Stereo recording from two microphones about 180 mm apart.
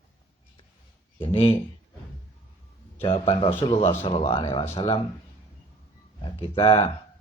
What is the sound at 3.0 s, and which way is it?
Speech, 30° left (ahead or behind).